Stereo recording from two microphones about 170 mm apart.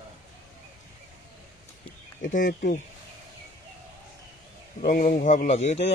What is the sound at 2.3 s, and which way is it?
Speech, 50° left (ahead or behind).